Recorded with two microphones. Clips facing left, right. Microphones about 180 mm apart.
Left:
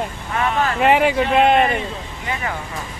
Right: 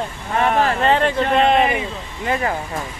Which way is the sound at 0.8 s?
10° left (ahead or behind).